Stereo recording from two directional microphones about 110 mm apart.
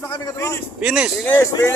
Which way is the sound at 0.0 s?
25° left (ahead or behind).